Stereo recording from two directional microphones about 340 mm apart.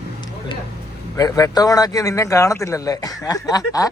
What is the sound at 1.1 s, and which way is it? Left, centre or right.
A man's voice, centre.